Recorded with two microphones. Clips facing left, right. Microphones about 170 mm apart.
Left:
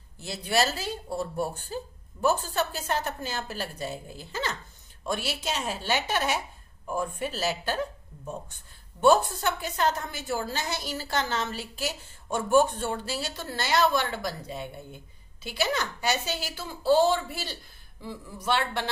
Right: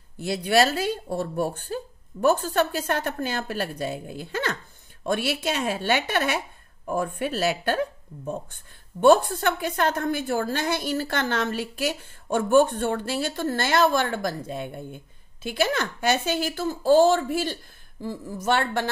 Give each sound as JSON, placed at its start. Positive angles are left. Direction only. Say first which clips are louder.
{"t": 0.2, "sound": "a woman's voice", "louder": "right 6 dB", "side_deg": -60}
{"t": 9.0, "sound": "a woman's voice", "louder": "right 4 dB", "side_deg": -60}